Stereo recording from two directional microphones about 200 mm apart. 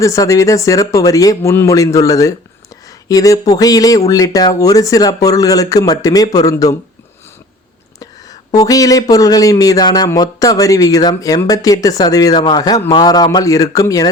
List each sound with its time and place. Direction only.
0.0 s speech: 15° left (ahead or behind)
7.9 s speech: 15° left (ahead or behind)